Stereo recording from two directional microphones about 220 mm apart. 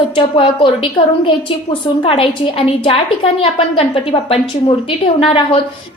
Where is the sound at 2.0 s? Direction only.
25° left (ahead or behind).